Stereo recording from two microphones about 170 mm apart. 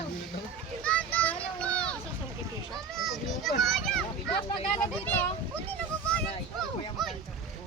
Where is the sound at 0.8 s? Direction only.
5° left (ahead or behind).